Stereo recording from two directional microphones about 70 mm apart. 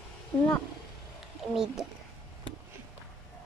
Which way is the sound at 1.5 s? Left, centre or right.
Centre.